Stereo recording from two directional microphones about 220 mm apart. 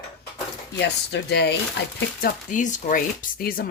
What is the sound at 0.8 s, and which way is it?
Speech, 50° left (ahead or behind).